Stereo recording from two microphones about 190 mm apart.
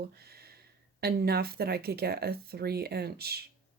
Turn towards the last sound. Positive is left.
turn(degrees=-55)  # may be behind; listen again after turning